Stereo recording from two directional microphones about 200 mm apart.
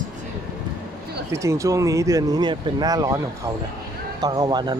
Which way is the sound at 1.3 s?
15° right (ahead or behind).